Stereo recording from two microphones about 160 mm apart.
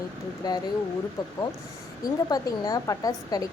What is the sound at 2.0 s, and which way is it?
Speech, 25° left (ahead or behind).